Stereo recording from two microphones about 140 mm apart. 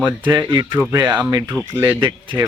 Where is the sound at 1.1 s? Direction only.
10° right (ahead or behind).